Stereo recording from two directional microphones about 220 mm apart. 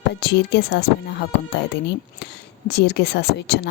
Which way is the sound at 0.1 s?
50° left (ahead or behind).